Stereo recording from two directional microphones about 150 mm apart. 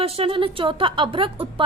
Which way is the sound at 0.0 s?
40° right (ahead or behind).